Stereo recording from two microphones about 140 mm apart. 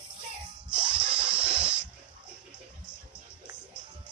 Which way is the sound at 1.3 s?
10° right (ahead or behind).